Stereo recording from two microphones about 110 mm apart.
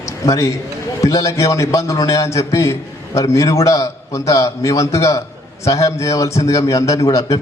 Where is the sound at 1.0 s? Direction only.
30° left (ahead or behind).